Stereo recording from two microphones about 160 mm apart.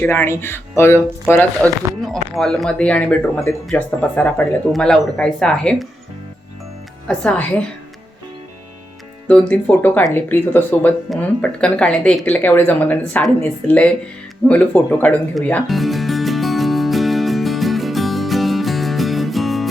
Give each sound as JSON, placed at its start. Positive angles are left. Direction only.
{"t": 0.0, "sound": "speech", "side_deg": 15}
{"t": 1.6, "sound": "speech", "side_deg": 5}
{"t": 7.1, "sound": "speech", "side_deg": 5}
{"t": 9.2, "sound": "speech", "side_deg": 10}
{"t": 14.4, "sound": "music", "side_deg": 10}